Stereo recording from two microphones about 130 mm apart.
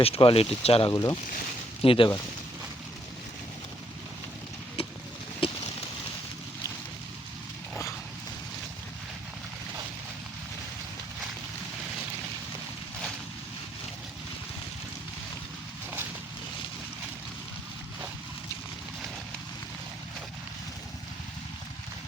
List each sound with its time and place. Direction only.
0.0 s speech: 45° left (ahead or behind)
0.9 s speech: 30° left (ahead or behind)
1.8 s speech: 45° left (ahead or behind)
4.8 s vehicle: 45° left (ahead or behind)